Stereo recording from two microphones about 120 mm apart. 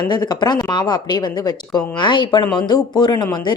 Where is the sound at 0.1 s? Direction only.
35° left (ahead or behind).